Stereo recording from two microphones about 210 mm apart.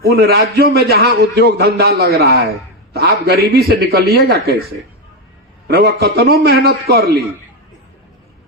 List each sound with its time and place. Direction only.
0.0 s a man's voice: 50° right (ahead or behind)
5.6 s a man's voice: 50° right (ahead or behind)